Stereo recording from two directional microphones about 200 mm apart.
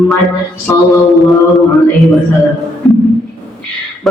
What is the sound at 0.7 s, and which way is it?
Mantra, 15° left (ahead or behind).